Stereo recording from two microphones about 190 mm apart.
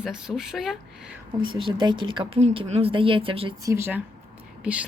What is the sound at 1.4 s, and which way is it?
Speech, 25° right (ahead or behind).